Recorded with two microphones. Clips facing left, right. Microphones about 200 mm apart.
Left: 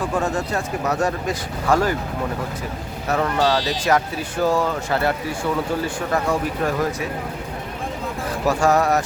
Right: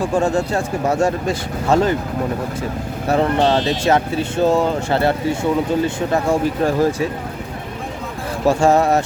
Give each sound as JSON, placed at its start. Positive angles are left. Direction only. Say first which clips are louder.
{"t": 0.1, "sound": "speech", "louder": "right 5 dB", "side_deg": -30}
{"t": 3.1, "sound": "speech", "louder": "right 4 dB", "side_deg": -30}
{"t": 8.4, "sound": "speech", "louder": "right 4 dB", "side_deg": -25}